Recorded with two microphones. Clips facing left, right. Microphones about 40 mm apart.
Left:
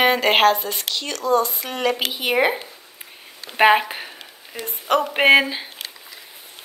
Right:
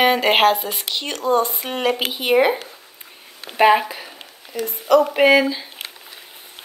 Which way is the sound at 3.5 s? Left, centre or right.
Left.